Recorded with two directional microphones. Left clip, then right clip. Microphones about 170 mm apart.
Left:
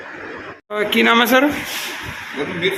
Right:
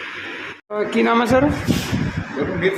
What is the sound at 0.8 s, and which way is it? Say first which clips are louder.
Speech: left 3 dB; centre (ahead or behind).